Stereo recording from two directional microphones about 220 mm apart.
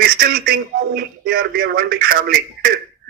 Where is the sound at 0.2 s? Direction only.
45° right (ahead or behind).